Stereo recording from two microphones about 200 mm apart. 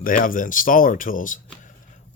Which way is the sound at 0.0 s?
45° left (ahead or behind).